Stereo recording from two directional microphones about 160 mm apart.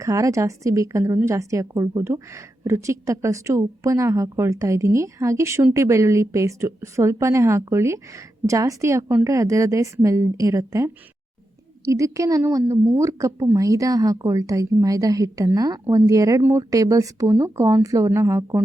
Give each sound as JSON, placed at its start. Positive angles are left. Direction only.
{"t": 0.0, "sound": "a woman's voice", "side_deg": -20}